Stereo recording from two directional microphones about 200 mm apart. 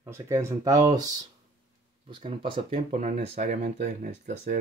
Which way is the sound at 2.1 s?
25° right (ahead or behind).